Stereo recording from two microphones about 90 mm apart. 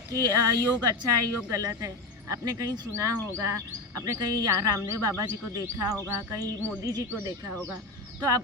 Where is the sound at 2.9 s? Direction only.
35° right (ahead or behind).